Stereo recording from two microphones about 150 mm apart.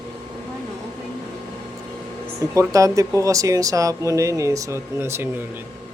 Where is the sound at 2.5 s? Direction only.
20° right (ahead or behind).